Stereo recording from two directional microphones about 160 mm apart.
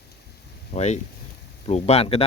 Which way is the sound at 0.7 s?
45° left (ahead or behind).